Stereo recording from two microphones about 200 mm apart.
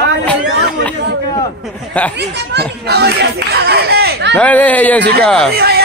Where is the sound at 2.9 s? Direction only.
55° right (ahead or behind).